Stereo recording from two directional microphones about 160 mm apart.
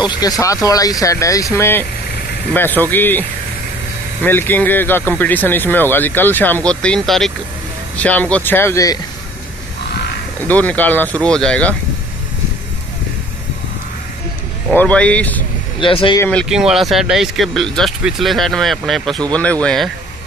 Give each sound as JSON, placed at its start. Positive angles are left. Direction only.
{"t": 0.0, "sound": "speech", "side_deg": 25}
{"t": 10.5, "sound": "speech", "side_deg": 10}
{"t": 14.7, "sound": "speech", "side_deg": 10}
{"t": 15.8, "sound": "speech", "side_deg": 30}
{"t": 16.2, "sound": "speech", "side_deg": 10}
{"t": 16.4, "sound": "speech", "side_deg": -5}